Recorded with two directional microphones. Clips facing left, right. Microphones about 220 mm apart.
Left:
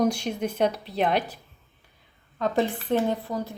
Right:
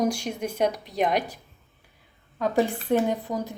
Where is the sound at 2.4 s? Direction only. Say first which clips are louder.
Right 1 dB; 10° right (ahead or behind).